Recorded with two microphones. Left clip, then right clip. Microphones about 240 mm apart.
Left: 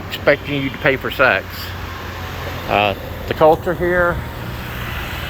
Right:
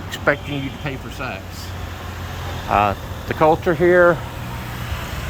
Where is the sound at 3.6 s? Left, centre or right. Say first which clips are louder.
Right 3 dB; right.